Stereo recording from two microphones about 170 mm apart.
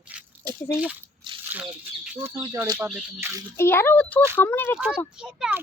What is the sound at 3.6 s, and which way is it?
Speech, 15° left (ahead or behind).